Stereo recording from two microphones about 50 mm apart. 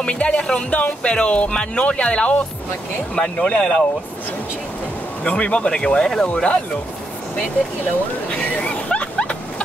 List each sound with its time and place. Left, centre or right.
0.0 s speech: left
5.3 s speech: left
8.3 s hubbub: left